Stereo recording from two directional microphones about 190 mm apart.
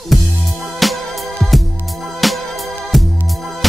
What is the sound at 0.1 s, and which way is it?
Music, centre (ahead or behind).